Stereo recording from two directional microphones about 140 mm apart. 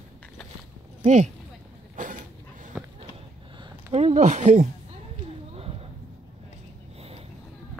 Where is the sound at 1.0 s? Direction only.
55° right (ahead or behind).